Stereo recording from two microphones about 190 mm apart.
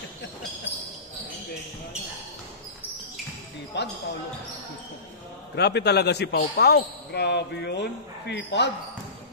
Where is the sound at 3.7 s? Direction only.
65° left (ahead or behind).